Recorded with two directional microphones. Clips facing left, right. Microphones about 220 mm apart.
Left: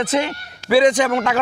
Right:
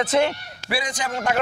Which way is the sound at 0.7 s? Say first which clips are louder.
Left 13 dB; 90° left.